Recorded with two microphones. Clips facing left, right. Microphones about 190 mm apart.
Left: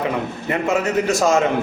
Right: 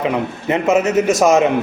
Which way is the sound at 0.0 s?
20° right (ahead or behind).